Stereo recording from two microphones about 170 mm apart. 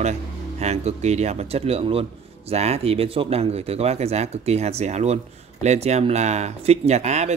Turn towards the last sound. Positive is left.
turn(degrees=-40)  # may be behind; listen again after turning